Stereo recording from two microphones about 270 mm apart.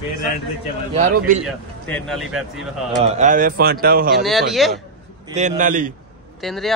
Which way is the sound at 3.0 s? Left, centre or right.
Right.